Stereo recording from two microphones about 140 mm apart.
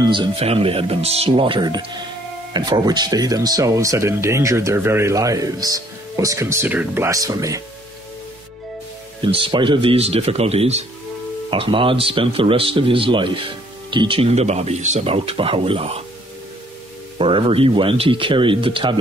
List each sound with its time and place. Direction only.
0.0 s speech: 35° right (ahead or behind)
0.4 s speech: 45° right (ahead or behind); by 7.6 s 25° right (ahead or behind)
9.2 s speech: 35° right (ahead or behind)
11.5 s speech: 40° right (ahead or behind)
17.2 s speech: 40° right (ahead or behind)